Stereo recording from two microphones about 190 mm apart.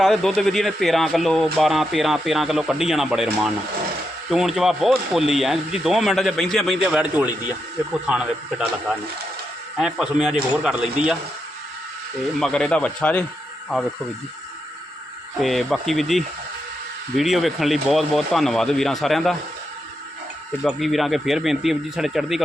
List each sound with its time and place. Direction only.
0.0 s speech: centre (ahead or behind)
9.7 s speech: 5° right (ahead or behind)
12.4 s speech: 5° left (ahead or behind)
15.4 s speech: centre (ahead or behind)
20.7 s speech: centre (ahead or behind)